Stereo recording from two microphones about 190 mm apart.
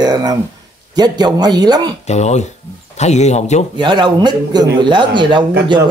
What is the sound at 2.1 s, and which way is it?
Speech, 35° left (ahead or behind).